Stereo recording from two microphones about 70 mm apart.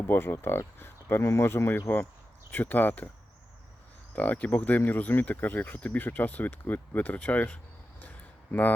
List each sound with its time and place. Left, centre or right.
0.1 s speech: left
4.1 s speech: left